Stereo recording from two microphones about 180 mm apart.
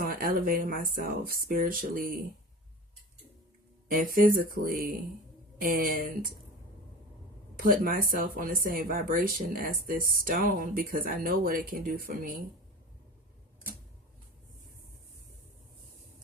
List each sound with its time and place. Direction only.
0.0 s speech: 55° right (ahead or behind)
3.8 s speech: 50° right (ahead or behind)
7.5 s speech: 50° right (ahead or behind)